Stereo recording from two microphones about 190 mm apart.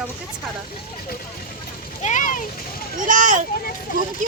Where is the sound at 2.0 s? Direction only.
40° left (ahead or behind).